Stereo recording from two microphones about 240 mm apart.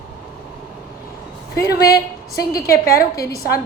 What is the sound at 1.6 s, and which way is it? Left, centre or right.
A woman's voice, left.